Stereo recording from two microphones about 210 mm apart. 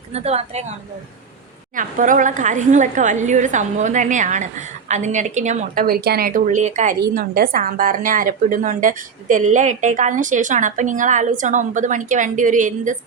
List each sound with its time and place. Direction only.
0.1 s speech: 30° right (ahead or behind)
1.7 s speech: 40° right (ahead or behind)
7.1 s speech: 45° right (ahead or behind)